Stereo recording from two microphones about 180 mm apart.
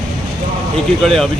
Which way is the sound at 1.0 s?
Centre (ahead or behind).